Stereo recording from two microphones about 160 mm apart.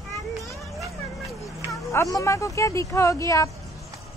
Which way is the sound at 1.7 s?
20° left (ahead or behind).